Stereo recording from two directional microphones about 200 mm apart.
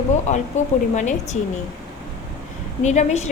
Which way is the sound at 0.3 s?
35° left (ahead or behind).